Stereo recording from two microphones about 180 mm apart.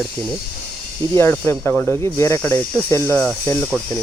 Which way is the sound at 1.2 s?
15° left (ahead or behind).